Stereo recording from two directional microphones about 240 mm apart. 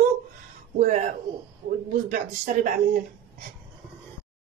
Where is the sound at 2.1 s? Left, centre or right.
Right.